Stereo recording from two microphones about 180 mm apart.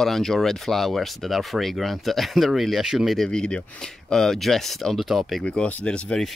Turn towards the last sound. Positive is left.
turn(degrees=5)  # may be behind; listen again after turning